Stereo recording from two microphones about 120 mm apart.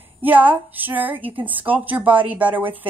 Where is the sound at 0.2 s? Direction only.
15° right (ahead or behind).